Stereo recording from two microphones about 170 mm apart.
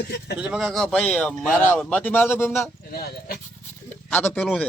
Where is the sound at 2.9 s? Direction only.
65° left (ahead or behind).